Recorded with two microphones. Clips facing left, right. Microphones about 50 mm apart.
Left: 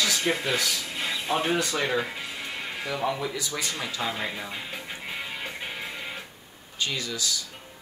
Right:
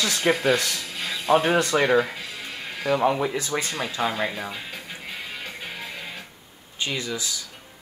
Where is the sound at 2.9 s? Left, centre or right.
Right.